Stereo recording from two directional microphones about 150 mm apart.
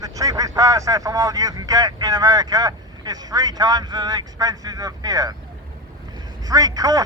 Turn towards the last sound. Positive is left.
turn(degrees=-25)  # may be behind; listen again after turning